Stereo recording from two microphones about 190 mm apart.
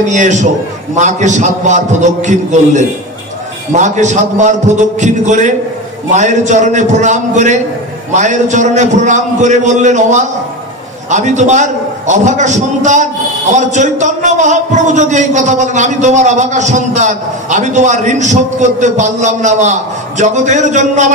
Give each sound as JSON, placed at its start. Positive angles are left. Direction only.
{"t": 0.1, "sound": "a man's voice", "side_deg": -40}